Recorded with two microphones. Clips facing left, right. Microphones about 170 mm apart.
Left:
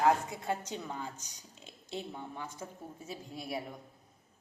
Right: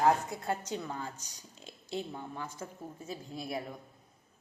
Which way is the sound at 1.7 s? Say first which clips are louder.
Right 3 dB; 15° right (ahead or behind).